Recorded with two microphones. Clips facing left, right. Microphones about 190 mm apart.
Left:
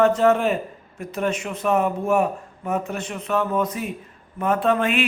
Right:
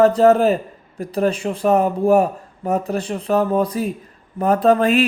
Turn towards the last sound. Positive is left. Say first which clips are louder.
# right 6 dB
turn(degrees=-40)  # may be behind; listen again after turning